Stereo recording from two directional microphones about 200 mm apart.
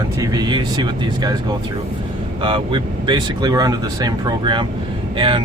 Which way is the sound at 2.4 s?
25° right (ahead or behind).